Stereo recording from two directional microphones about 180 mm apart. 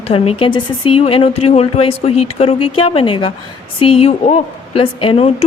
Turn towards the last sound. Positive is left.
turn(degrees=35)  # may be behind; listen again after turning